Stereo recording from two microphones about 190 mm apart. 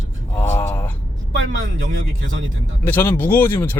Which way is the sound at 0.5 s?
10° left (ahead or behind).